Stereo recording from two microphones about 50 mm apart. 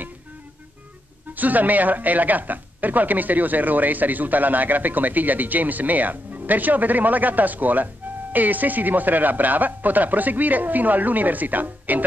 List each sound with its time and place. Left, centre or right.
1.3 s speech: right